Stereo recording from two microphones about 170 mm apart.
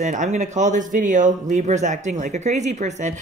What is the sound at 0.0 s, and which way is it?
A woman's voice, 45° right (ahead or behind).